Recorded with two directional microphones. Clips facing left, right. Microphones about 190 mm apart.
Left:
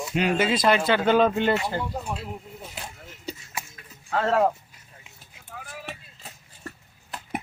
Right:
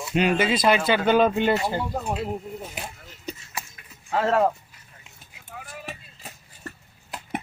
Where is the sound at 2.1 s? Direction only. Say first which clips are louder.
Right 7 dB; 50° right (ahead or behind).